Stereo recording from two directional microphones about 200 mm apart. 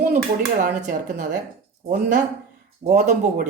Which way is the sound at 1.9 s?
40° right (ahead or behind).